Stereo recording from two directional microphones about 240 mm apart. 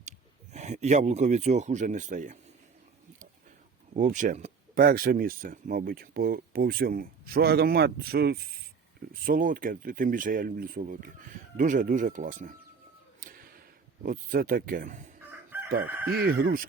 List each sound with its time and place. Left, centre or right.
0.5 s speech: right
3.9 s speech: right
13.1 s a sound: right
14.0 s speech: right